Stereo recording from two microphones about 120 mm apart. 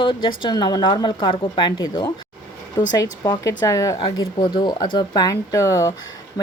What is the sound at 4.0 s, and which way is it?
Speech, 40° left (ahead or behind).